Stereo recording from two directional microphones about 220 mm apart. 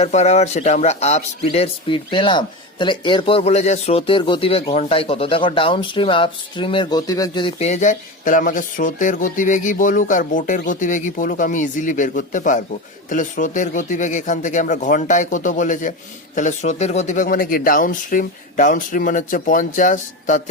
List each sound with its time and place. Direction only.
0.0 s speech: 30° left (ahead or behind)